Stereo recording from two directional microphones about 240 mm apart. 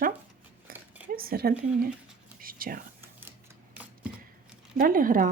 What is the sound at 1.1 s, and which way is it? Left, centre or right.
Speech, right.